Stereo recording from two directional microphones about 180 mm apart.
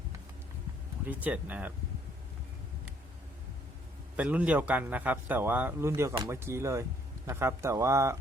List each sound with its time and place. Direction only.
1.0 s speech: 10° right (ahead or behind)
4.2 s speech: 5° right (ahead or behind)